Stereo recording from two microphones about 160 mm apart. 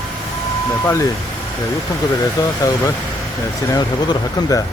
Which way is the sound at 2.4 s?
20° left (ahead or behind).